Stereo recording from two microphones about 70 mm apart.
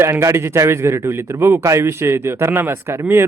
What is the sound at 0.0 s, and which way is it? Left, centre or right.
A man's voice, right.